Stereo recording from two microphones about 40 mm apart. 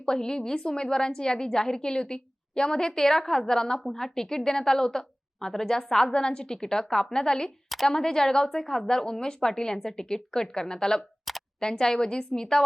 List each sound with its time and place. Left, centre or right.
0.0 s a woman's voice: centre
11.3 s camera: centre
11.6 s a woman's voice: centre